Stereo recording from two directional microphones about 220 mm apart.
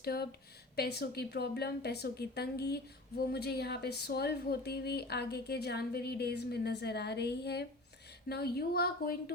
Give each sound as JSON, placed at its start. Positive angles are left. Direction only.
{"t": 0.0, "sound": "a woman's voice", "side_deg": 45}